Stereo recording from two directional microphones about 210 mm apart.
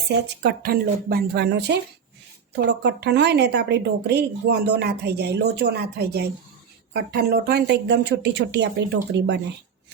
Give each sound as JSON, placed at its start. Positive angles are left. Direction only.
{"t": 0.1, "sound": "speech", "side_deg": -50}